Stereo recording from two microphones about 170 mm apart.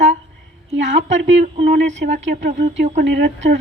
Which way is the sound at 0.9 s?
40° right (ahead or behind).